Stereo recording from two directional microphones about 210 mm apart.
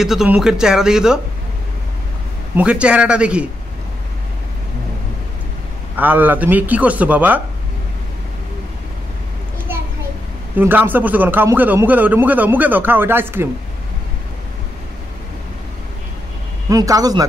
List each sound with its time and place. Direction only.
0.0 s speech: centre (ahead or behind)
2.5 s speech: 5° right (ahead or behind)
5.9 s a man's voice: 10° right (ahead or behind)
10.5 s a man's voice: 10° right (ahead or behind)
16.6 s a man's voice: 15° right (ahead or behind)